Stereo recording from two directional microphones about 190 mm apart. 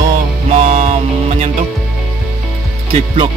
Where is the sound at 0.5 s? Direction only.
40° right (ahead or behind).